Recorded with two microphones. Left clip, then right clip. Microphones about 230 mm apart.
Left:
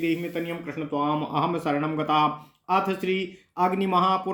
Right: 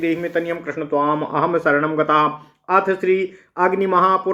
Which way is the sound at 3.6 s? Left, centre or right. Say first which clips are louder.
Right 7 dB; left.